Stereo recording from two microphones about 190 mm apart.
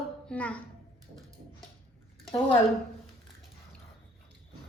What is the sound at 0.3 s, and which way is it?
Speech, 5° left (ahead or behind).